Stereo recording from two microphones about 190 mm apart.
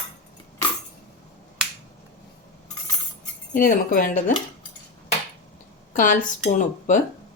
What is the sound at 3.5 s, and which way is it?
Speech, 45° left (ahead or behind).